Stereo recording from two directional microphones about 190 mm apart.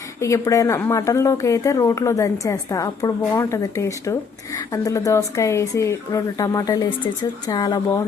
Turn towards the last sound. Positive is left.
turn(degrees=20)  # may be behind; listen again after turning